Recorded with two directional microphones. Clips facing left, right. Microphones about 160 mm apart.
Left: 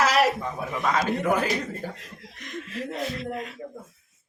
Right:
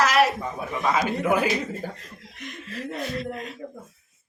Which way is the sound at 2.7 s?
40° right (ahead or behind).